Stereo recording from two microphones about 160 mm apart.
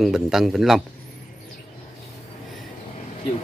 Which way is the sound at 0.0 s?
Centre (ahead or behind).